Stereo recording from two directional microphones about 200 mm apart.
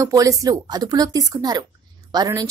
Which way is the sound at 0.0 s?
15° right (ahead or behind).